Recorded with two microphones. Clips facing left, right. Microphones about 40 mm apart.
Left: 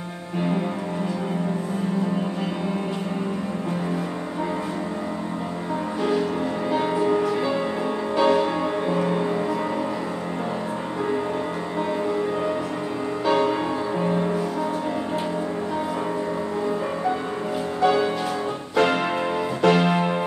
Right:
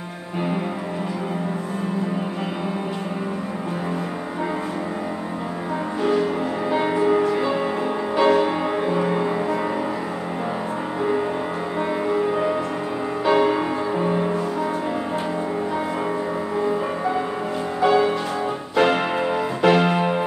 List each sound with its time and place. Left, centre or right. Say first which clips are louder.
6.7 s music: right 3 dB; centre
12.1 s music: right 3 dB; centre
17.7 s music: right 3 dB; centre